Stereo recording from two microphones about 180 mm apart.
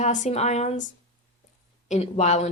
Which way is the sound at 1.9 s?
40° left (ahead or behind).